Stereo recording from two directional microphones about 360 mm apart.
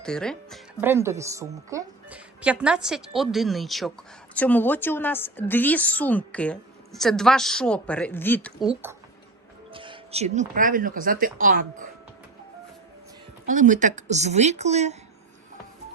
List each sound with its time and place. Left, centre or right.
0.0 s a woman's voice: centre
8.7 s speech: centre; by 11.9 s right
13.5 s speech: right